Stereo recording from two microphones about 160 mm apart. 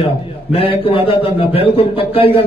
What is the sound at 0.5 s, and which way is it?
A man's voice, 35° left (ahead or behind).